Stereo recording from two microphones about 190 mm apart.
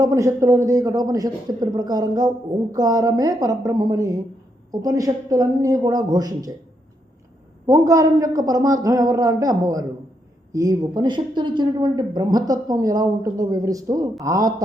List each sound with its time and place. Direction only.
0.0 s a woman's voice: 15° right (ahead or behind)
7.7 s a woman's voice: 15° right (ahead or behind)